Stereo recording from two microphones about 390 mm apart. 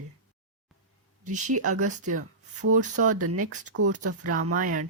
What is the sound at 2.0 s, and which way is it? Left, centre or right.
Speech, right.